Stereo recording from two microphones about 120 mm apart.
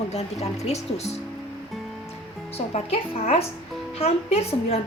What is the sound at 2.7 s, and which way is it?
A woman's voice, 60° left (ahead or behind).